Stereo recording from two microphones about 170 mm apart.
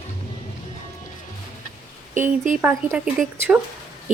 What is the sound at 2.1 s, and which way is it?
Speech, 50° right (ahead or behind).